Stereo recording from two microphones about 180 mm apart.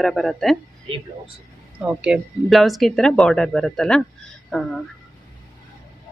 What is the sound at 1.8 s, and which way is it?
Speech, 5° right (ahead or behind).